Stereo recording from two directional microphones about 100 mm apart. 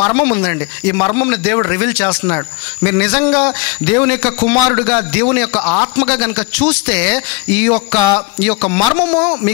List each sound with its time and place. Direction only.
0.1 s a man's voice: 20° left (ahead or behind)